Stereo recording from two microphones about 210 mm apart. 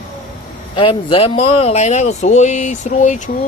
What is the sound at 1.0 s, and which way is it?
Speech, 25° left (ahead or behind).